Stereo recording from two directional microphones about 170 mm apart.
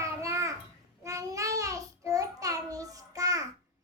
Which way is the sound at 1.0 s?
20° right (ahead or behind).